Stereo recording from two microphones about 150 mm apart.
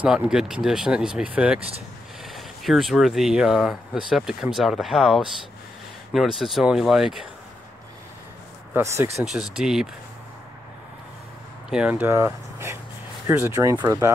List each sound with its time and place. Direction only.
0.0 s speech: 5° right (ahead or behind)
8.7 s speech: 15° right (ahead or behind)
9.2 s speech: 5° right (ahead or behind)
11.7 s speech: 10° right (ahead or behind)